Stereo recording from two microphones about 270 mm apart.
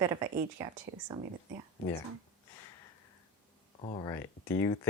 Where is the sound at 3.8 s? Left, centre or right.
Centre.